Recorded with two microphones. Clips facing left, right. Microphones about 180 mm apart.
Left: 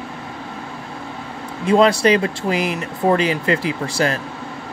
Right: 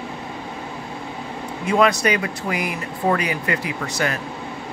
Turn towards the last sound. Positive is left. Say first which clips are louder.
# left 4 dB
turn(degrees=30)  # may be behind; listen again after turning